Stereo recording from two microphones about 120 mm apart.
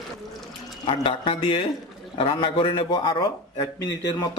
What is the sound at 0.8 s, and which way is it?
A man's voice, 45° left (ahead or behind).